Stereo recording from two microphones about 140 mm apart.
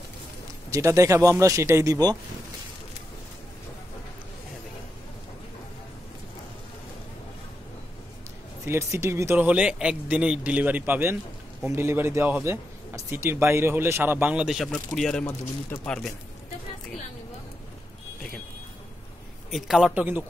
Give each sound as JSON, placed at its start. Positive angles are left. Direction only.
{"t": 0.7, "sound": "speech", "side_deg": -20}
{"t": 8.6, "sound": "speech", "side_deg": -20}
{"t": 19.5, "sound": "speech", "side_deg": -5}